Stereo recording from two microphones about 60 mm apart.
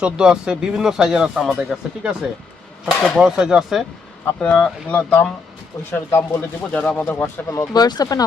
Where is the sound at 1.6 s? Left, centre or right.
Right.